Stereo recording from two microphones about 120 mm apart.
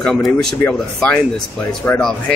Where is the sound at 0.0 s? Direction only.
5° left (ahead or behind).